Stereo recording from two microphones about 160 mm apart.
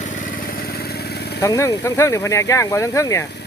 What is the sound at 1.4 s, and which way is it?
Speech, 20° left (ahead or behind).